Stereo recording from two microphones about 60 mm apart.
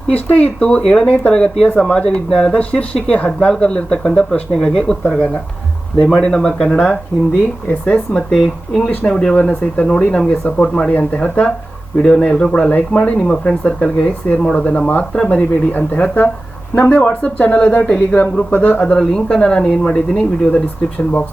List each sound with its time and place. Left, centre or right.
0.1 s speech: left
18.9 s speech: centre